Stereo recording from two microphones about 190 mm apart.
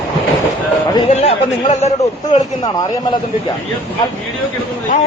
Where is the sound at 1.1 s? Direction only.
35° left (ahead or behind).